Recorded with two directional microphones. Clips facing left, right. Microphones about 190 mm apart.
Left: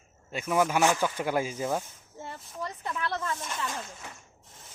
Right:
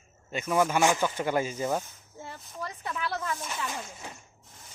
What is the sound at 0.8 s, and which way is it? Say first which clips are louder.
Speech: even; 15° right (ahead or behind).